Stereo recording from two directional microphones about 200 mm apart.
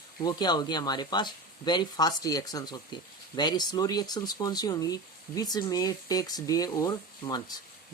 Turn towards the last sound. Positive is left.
turn(degrees=20)  # may be behind; listen again after turning